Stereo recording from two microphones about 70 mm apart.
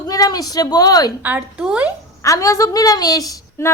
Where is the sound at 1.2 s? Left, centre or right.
Right.